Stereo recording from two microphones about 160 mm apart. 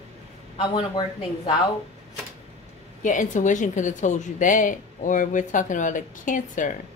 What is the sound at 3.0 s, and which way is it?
A woman's voice, 50° left (ahead or behind).